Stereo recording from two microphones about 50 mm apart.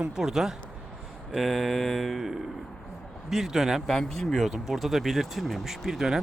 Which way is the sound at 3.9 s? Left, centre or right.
Centre.